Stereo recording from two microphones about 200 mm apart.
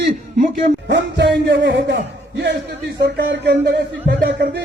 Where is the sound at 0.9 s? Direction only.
60° right (ahead or behind).